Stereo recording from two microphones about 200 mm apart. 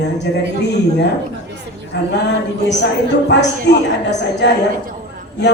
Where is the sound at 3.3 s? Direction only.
60° left (ahead or behind).